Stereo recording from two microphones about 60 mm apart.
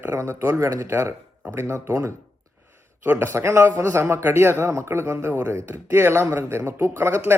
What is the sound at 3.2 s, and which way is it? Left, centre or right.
Speech, right.